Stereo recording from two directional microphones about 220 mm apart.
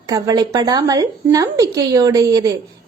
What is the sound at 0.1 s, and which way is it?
Speech, 15° right (ahead or behind).